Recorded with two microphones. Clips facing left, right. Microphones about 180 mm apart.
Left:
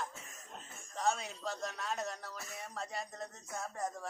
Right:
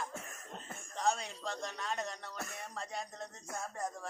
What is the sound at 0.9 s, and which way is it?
Speech, centre (ahead or behind).